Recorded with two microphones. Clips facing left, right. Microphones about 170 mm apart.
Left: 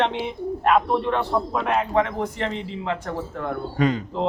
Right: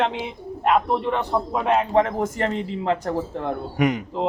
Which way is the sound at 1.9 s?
40° right (ahead or behind).